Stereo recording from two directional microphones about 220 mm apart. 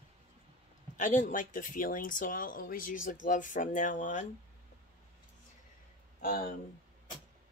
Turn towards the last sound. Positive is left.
turn(degrees=40)  # may be behind; listen again after turning